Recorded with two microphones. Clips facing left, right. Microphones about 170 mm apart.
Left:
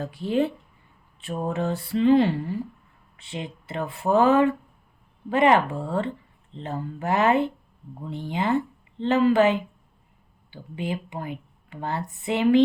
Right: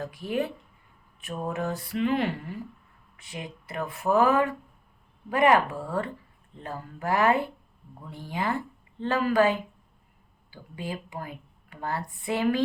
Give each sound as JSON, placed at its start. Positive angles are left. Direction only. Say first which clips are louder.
{"t": 0.0, "sound": "speech", "louder": "left 5 dB", "side_deg": 30}